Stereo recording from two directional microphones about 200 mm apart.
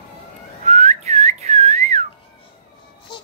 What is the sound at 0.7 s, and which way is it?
Whistling, 35° right (ahead or behind).